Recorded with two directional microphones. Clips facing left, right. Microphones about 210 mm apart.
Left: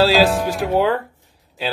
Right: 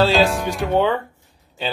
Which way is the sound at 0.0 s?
5° left (ahead or behind).